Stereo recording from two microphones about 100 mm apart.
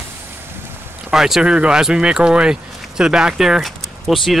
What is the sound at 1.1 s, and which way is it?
Speech, 5° right (ahead or behind).